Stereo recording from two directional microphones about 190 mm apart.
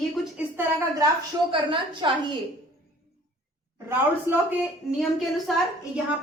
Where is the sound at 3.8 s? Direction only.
10° right (ahead or behind).